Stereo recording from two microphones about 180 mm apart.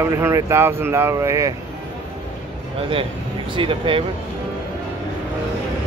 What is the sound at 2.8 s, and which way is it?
Speech, 30° right (ahead or behind).